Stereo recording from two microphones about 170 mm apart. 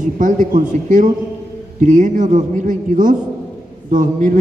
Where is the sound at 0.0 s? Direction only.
50° right (ahead or behind).